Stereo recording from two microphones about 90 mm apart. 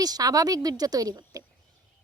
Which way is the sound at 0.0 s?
45° right (ahead or behind).